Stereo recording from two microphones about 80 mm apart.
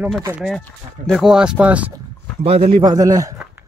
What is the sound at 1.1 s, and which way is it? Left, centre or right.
Speech, centre.